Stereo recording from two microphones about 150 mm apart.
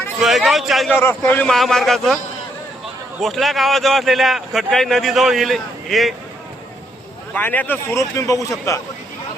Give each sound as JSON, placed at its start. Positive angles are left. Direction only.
{"t": 0.2, "sound": "a man's voice", "side_deg": 0}
{"t": 1.0, "sound": "a man's voice", "side_deg": 15}
{"t": 3.2, "sound": "a man's voice", "side_deg": 0}
{"t": 7.3, "sound": "a man's voice", "side_deg": 10}